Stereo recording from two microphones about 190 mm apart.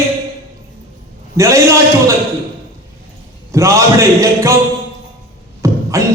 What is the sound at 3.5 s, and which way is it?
Speech, 15° right (ahead or behind).